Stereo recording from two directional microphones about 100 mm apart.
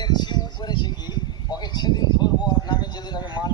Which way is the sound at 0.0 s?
45° left (ahead or behind).